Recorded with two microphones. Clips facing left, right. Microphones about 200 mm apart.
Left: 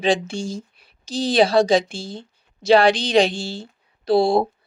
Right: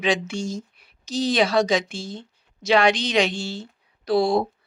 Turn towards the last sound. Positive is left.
turn(degrees=30)  # may be behind; listen again after turning